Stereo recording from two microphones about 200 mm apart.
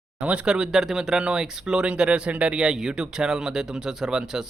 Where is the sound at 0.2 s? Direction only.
5° right (ahead or behind).